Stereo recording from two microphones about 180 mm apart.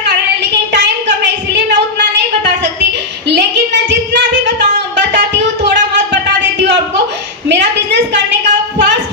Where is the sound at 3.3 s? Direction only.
80° right.